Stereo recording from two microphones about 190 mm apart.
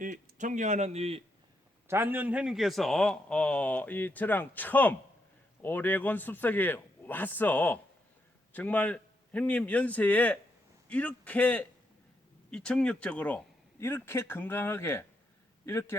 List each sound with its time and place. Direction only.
0.0 s speech: 45° right (ahead or behind)
1.9 s a man's voice: 10° right (ahead or behind); by 16.0 s 15° left (ahead or behind)